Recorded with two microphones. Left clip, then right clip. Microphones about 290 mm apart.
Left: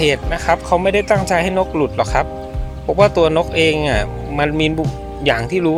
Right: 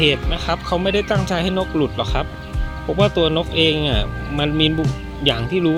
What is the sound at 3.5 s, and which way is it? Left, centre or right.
Speech, left.